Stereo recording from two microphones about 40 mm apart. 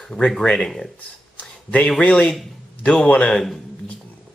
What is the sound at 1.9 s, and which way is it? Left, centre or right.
Speech, left.